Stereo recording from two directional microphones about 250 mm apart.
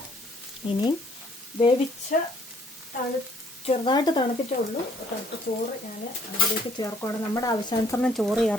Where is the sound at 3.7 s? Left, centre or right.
Centre.